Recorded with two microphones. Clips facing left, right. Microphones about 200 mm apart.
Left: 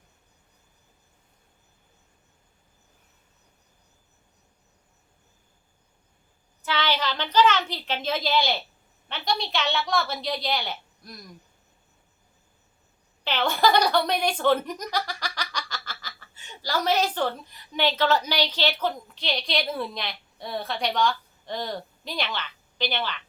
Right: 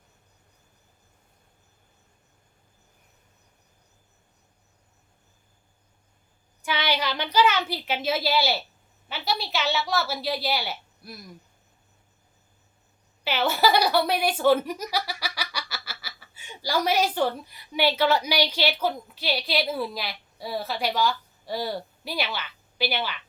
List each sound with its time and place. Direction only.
6.6 s a woman's voice: 10° right (ahead or behind)
13.2 s speech: 10° right (ahead or behind)